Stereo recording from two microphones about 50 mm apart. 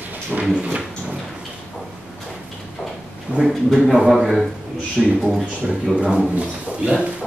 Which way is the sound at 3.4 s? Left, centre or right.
Centre.